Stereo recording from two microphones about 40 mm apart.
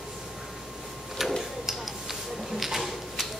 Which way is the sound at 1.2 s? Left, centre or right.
Centre.